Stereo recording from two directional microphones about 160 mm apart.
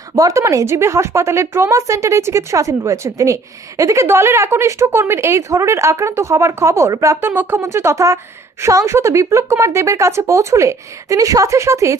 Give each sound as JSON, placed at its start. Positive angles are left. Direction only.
{"t": 0.1, "sound": "a woman's voice", "side_deg": -20}